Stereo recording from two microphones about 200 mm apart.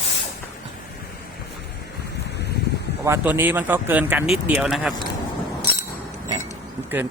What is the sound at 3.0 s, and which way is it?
Speech, 10° right (ahead or behind).